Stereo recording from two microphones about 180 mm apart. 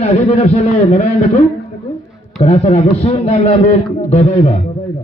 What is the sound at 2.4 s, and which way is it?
A man's voice, 35° left (ahead or behind).